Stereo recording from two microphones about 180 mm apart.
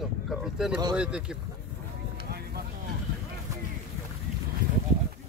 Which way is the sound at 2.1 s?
60° right (ahead or behind).